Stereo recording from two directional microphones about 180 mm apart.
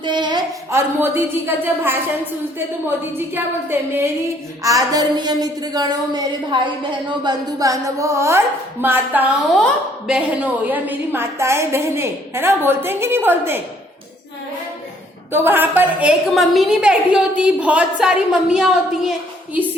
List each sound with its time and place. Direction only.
0.0 s speech: 25° right (ahead or behind)
3.2 s a woman's voice: 10° right (ahead or behind)
15.3 s a woman's voice: 10° right (ahead or behind)